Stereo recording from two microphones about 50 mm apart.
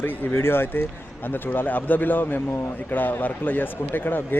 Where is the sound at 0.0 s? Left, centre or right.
Left.